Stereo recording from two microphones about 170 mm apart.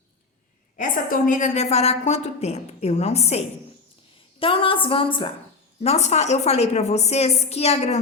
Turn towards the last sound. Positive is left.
turn(degrees=40)  # may be behind; listen again after turning